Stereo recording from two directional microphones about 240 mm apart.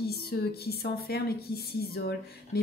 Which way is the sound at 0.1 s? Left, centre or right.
Left.